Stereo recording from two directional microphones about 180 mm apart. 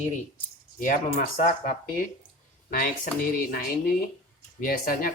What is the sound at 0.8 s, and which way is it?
Speech, 50° left (ahead or behind).